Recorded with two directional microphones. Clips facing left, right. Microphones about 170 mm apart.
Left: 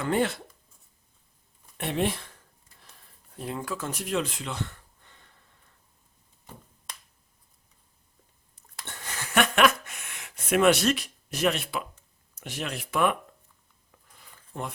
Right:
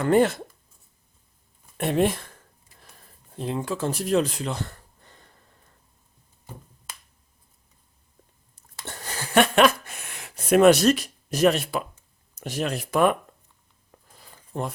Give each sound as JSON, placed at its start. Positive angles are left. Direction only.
{"t": 0.0, "sound": "speech", "side_deg": -45}
{"t": 1.8, "sound": "speech", "side_deg": -45}
{"t": 3.3, "sound": "speech", "side_deg": -25}
{"t": 8.8, "sound": "a sound", "side_deg": -35}
{"t": 12.4, "sound": "speech", "side_deg": -40}
{"t": 14.1, "sound": "a sound", "side_deg": -35}